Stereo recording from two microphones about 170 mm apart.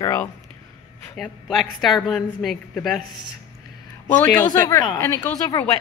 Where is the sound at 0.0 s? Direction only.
15° left (ahead or behind).